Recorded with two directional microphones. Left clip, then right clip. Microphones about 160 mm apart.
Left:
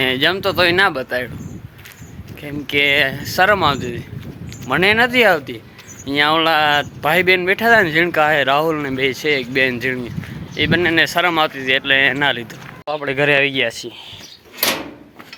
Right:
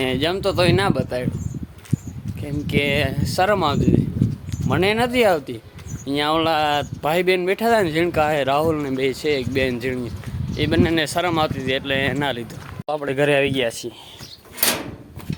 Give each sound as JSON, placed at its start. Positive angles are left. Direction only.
{"t": 0.0, "sound": "speech", "side_deg": 0}
{"t": 2.4, "sound": "speech", "side_deg": 0}
{"t": 13.1, "sound": "speech", "side_deg": -15}